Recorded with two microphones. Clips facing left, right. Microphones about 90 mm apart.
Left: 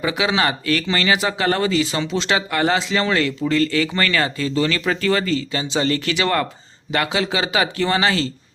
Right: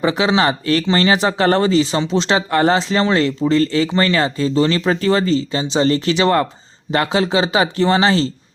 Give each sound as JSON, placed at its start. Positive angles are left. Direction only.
{"t": 0.0, "sound": "speech", "side_deg": -30}